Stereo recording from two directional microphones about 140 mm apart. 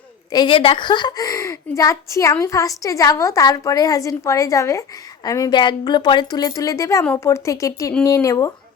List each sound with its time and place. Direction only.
0.3 s a woman's voice: 30° left (ahead or behind)